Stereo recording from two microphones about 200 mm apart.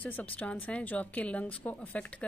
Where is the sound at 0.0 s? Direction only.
10° left (ahead or behind).